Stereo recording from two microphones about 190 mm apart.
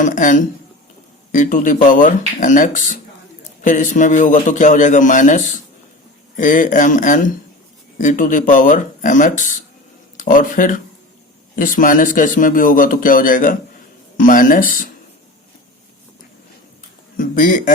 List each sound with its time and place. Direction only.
0.0 s a man's voice: 40° left (ahead or behind)
17.2 s a man's voice: 45° left (ahead or behind)